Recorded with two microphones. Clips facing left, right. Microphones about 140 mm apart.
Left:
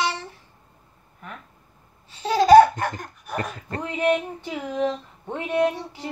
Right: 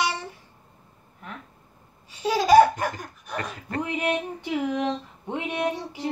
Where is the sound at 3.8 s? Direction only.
15° right (ahead or behind).